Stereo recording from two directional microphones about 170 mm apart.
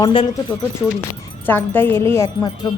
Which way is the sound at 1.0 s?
10° left (ahead or behind).